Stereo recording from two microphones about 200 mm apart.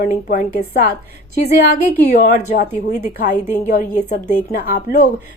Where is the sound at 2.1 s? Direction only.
40° left (ahead or behind).